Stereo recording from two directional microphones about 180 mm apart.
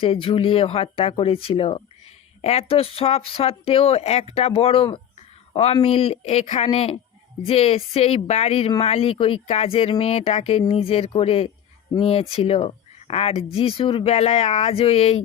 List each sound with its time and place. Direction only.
0.0 s speech: 30° left (ahead or behind)